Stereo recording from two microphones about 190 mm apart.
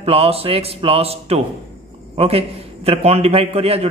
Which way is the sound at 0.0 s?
30° right (ahead or behind).